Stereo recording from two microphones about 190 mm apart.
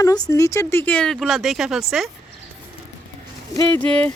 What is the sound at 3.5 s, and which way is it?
Speech, 10° left (ahead or behind).